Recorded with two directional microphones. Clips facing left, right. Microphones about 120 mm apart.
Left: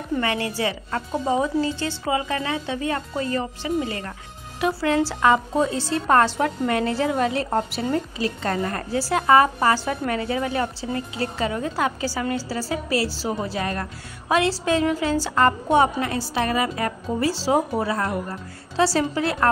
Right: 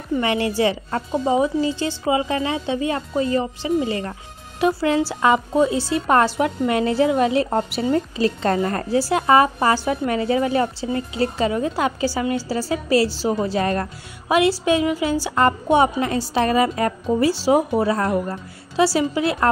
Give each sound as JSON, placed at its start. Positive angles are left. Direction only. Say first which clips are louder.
{"t": 0.2, "sound": "a woman's voice", "louder": "right 6 dB", "side_deg": -20}
{"t": 1.1, "sound": "speech", "louder": "right 3 dB", "side_deg": -5}
{"t": 1.4, "sound": "a woman's voice", "louder": "right 3 dB", "side_deg": -15}
{"t": 7.9, "sound": "a woman's voice", "louder": "right 6 dB", "side_deg": -30}
{"t": 9.1, "sound": "a woman's voice", "louder": "even", "side_deg": -20}
{"t": 14.3, "sound": "a woman's voice", "louder": "right 3 dB", "side_deg": -15}
{"t": 17.3, "sound": "a woman's voice", "louder": "right 1 dB", "side_deg": -15}
{"t": 18.8, "sound": "a woman's voice", "louder": "right 2 dB", "side_deg": -10}